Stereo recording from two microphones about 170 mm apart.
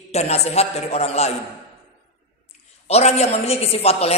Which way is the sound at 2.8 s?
40° left (ahead or behind).